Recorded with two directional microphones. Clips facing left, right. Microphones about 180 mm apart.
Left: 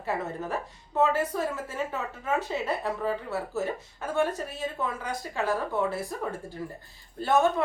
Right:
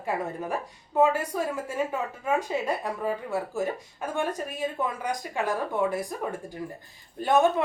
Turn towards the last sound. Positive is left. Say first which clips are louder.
# right 2 dB
turn(degrees=-15)  # may be behind; listen again after turning